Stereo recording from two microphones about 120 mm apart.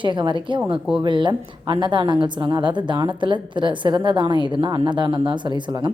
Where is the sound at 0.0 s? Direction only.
40° right (ahead or behind).